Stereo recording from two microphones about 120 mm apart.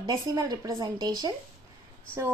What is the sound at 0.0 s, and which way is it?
A woman's voice, 35° right (ahead or behind).